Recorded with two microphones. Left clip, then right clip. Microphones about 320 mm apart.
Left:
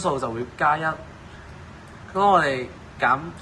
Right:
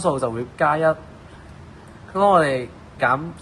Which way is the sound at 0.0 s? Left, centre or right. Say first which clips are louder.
Right 3 dB; right.